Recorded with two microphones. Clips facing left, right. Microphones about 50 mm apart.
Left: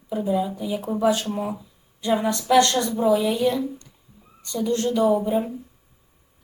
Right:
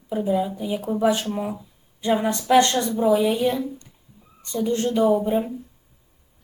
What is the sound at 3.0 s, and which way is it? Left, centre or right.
A woman's voice, centre.